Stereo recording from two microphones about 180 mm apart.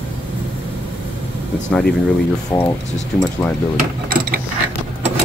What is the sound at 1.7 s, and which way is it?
Speech, 5° left (ahead or behind).